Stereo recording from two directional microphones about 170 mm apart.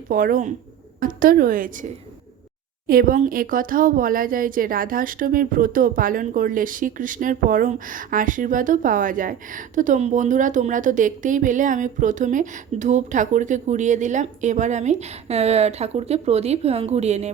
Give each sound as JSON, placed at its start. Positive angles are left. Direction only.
{"t": 0.1, "sound": "a woman's voice", "side_deg": -55}